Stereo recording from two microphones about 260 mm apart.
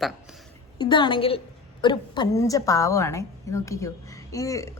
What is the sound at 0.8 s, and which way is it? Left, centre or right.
A woman's voice, centre.